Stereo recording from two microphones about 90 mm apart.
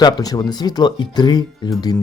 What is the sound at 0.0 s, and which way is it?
Speech, 45° left (ahead or behind).